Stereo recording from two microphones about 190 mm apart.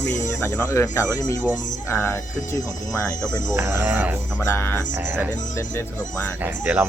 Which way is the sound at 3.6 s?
10° right (ahead or behind).